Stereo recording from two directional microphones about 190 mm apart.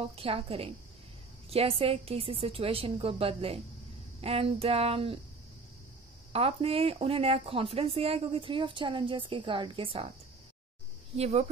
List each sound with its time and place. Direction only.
0.1 s speech: 30° right (ahead or behind)
6.3 s speech: 30° right (ahead or behind)
11.1 s speech: 35° right (ahead or behind)